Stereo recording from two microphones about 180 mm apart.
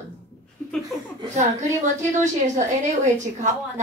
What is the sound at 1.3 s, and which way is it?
A woman's voice, 40° right (ahead or behind).